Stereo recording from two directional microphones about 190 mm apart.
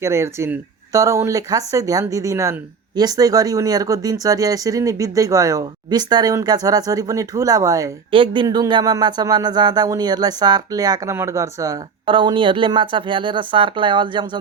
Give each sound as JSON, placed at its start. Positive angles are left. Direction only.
{"t": 0.0, "sound": "speech", "side_deg": -15}